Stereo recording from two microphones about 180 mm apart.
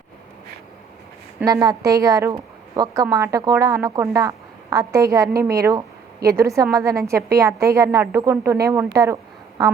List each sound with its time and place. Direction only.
1.5 s a woman's voice: 20° right (ahead or behind)